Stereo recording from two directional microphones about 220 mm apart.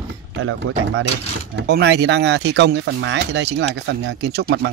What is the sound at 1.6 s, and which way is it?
Speech, 50° right (ahead or behind).